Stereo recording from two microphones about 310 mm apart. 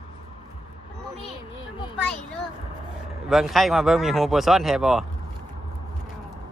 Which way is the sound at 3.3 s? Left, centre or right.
Centre.